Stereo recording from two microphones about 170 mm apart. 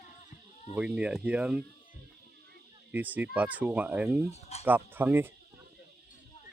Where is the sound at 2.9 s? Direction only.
10° right (ahead or behind).